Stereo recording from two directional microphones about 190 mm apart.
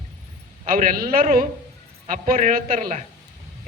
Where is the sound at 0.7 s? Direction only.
50° right (ahead or behind).